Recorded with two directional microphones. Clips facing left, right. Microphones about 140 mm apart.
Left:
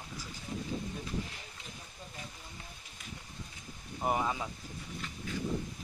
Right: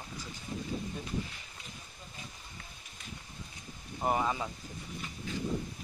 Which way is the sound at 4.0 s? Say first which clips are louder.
Right 1 dB; centre (ahead or behind).